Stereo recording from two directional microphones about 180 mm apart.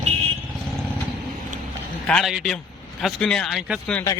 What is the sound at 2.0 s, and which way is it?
Speech, 5° left (ahead or behind).